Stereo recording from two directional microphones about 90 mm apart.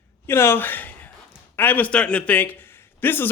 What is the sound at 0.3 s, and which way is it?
A man's voice, 25° left (ahead or behind).